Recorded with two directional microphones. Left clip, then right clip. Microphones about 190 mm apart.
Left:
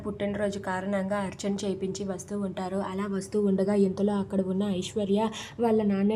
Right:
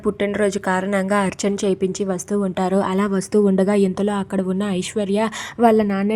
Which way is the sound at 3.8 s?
90° right.